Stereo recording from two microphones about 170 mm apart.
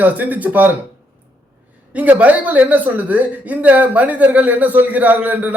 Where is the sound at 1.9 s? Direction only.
10° right (ahead or behind).